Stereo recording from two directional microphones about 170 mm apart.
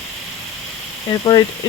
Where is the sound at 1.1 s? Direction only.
25° left (ahead or behind).